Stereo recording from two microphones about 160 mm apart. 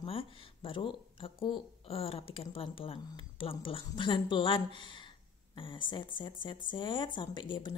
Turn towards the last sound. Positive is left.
turn(degrees=30)  # may be behind; listen again after turning